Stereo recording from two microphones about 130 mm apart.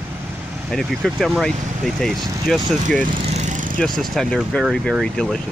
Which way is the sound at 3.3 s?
70° right (ahead or behind).